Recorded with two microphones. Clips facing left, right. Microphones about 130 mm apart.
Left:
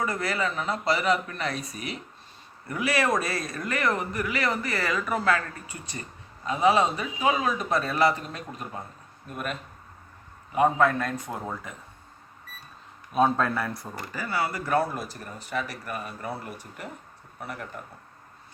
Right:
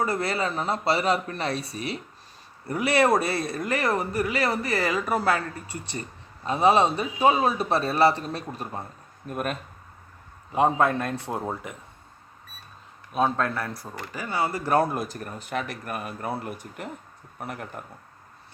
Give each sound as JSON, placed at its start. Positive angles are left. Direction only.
{"t": 0.0, "sound": "a woman's voice", "side_deg": -30}
{"t": 9.3, "sound": "speech", "side_deg": -45}
{"t": 10.5, "sound": "a woman's voice", "side_deg": -25}
{"t": 13.1, "sound": "speech", "side_deg": 0}
{"t": 14.1, "sound": "a woman's voice", "side_deg": -20}
{"t": 14.8, "sound": "speech", "side_deg": -50}
{"t": 17.4, "sound": "speech", "side_deg": -50}